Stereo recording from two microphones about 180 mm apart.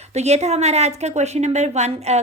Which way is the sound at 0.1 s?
35° right (ahead or behind).